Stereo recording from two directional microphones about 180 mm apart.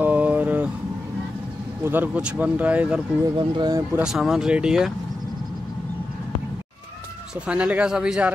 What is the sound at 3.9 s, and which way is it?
A man's voice, 5° right (ahead or behind).